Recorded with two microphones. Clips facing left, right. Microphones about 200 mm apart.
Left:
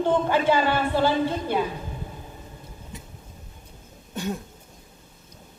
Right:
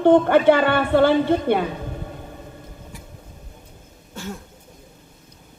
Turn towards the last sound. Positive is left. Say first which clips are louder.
# left 3 dB
turn(degrees=20)  # may be behind; listen again after turning